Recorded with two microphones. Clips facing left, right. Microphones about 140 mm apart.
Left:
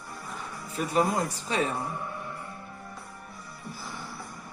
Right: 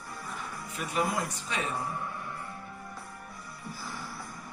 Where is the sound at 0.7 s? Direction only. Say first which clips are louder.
Left 5 dB; 35° left (ahead or behind).